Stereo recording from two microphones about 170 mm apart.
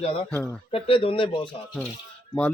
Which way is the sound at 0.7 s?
30° left (ahead or behind).